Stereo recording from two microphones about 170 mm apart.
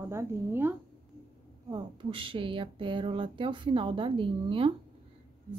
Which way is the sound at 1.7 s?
30° right (ahead or behind).